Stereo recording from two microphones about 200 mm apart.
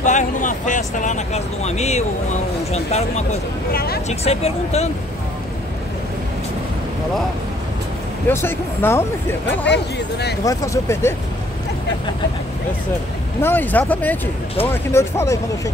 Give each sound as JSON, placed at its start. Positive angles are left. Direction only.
{"t": 0.0, "sound": "speech", "side_deg": 40}
{"t": 3.7, "sound": "speech", "side_deg": 50}
{"t": 4.1, "sound": "speech", "side_deg": 30}
{"t": 8.3, "sound": "speech", "side_deg": 10}
{"t": 9.7, "sound": "speech", "side_deg": 55}
{"t": 10.4, "sound": "speech", "side_deg": 15}
{"t": 13.4, "sound": "speech", "side_deg": 10}